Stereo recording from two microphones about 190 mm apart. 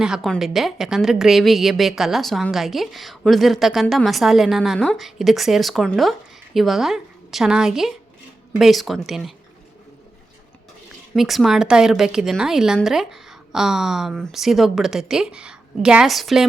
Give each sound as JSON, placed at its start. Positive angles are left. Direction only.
{"t": 0.0, "sound": "a woman's voice", "side_deg": 0}
{"t": 11.1, "sound": "a woman's voice", "side_deg": 0}